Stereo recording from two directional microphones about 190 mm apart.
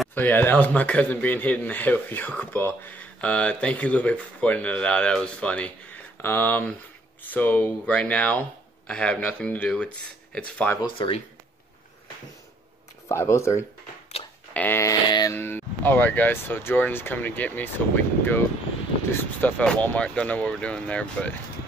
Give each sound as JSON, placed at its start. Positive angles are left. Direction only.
{"t": 0.0, "sound": "speech", "side_deg": 10}
{"t": 10.8, "sound": "speech", "side_deg": 30}
{"t": 13.1, "sound": "speech", "side_deg": 15}
{"t": 19.4, "sound": "speech", "side_deg": 5}